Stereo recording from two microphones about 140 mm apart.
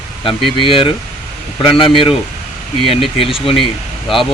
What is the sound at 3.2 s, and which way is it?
Speech, 40° left (ahead or behind).